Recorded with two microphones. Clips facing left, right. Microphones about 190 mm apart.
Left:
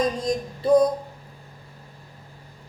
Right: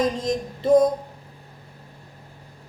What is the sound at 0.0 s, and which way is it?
Speech, 20° right (ahead or behind).